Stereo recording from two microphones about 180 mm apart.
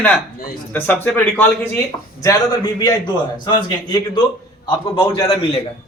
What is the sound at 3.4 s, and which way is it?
A man's voice, 25° left (ahead or behind).